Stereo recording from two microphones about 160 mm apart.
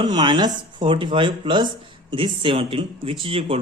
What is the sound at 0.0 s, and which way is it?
Speech, 30° right (ahead or behind).